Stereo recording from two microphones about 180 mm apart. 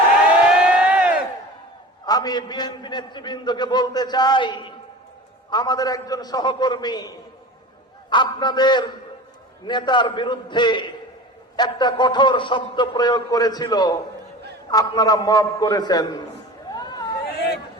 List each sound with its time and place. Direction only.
0.6 s crowd: 5° right (ahead or behind)
2.0 s a man's voice: 20° left (ahead or behind)
8.1 s a man's voice: 25° left (ahead or behind)
16.7 s chatter: 20° left (ahead or behind)
17.3 s hubbub: 60° left (ahead or behind)